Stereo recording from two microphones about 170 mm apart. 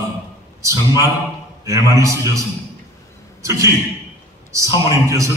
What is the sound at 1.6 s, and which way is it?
Mantra, 20° right (ahead or behind).